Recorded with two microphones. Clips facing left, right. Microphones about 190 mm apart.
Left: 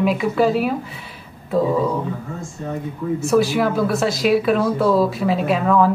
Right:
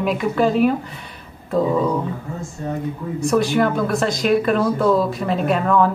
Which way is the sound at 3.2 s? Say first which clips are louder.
Even; centre (ahead or behind).